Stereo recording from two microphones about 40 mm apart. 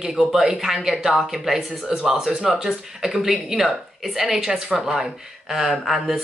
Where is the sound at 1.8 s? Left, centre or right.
Centre.